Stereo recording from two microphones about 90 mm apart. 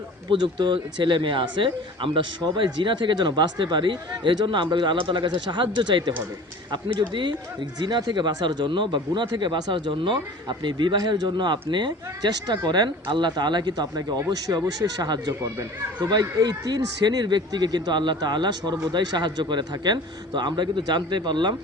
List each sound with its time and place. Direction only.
0.3 s speech: 60° right (ahead or behind)
10.9 s speech: 50° right (ahead or behind)